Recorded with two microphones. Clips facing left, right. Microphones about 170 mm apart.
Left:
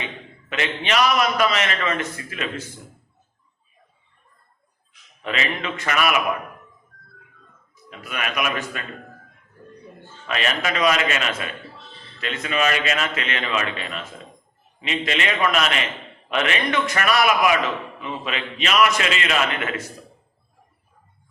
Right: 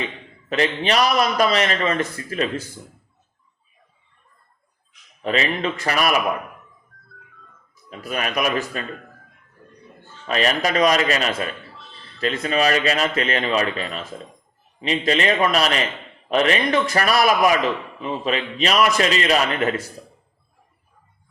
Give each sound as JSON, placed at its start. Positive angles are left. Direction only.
{"t": 0.5, "sound": "a man's voice", "side_deg": -35}
{"t": 5.2, "sound": "a man's voice", "side_deg": -35}
{"t": 7.9, "sound": "a man's voice", "side_deg": -35}
{"t": 10.2, "sound": "a man's voice", "side_deg": -35}